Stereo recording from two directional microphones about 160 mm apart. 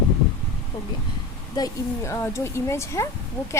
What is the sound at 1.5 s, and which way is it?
A woman's voice, 25° left (ahead or behind).